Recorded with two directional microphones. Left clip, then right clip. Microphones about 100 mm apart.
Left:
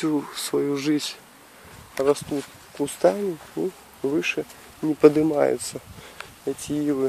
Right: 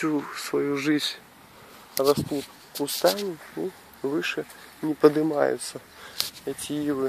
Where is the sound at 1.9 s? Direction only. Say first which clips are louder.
Left 1 dB; 35° right (ahead or behind).